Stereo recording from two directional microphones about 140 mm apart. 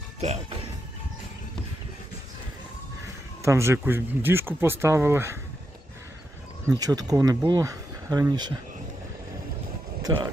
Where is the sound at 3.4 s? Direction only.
20° right (ahead or behind).